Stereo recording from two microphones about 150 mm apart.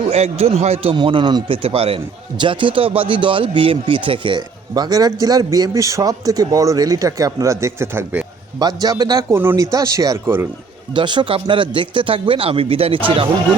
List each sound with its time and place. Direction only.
0.1 s speech: 45° right (ahead or behind); by 8.2 s 15° right (ahead or behind)
8.5 s speech: 25° right (ahead or behind)
9.3 s speech: 15° right (ahead or behind)
10.9 s speech: 30° right (ahead or behind)